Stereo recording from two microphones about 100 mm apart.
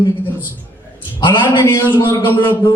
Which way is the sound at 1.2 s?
50° left (ahead or behind).